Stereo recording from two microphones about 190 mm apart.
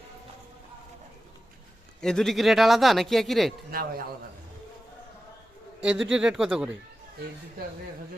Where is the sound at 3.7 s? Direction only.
50° right (ahead or behind).